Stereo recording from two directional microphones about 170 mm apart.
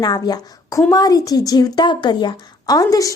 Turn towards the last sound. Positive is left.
turn(degrees=20)  # may be behind; listen again after turning